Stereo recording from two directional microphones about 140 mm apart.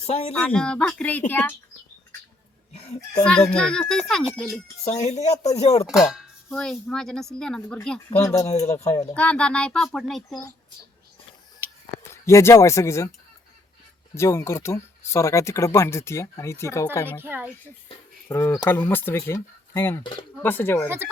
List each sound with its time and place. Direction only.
0.1 s speech: 50° left (ahead or behind)
0.3 s speech: 5° left (ahead or behind)
2.7 s a child's voice: 50° left (ahead or behind)
3.2 s speech: 5° left (ahead or behind)
4.8 s speech: 50° left (ahead or behind)
5.9 s speech: centre (ahead or behind)
8.2 s speech: 20° left (ahead or behind)
9.1 s speech: 10° left (ahead or behind)
12.1 s speech: 20° left (ahead or behind)
14.2 s speech: 20° left (ahead or behind)
17.1 s speech: 15° right (ahead or behind)
18.3 s speech: 20° left (ahead or behind)
20.8 s speech: 15° right (ahead or behind)